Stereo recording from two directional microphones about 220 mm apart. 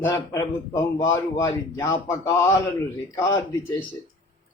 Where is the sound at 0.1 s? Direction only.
15° left (ahead or behind).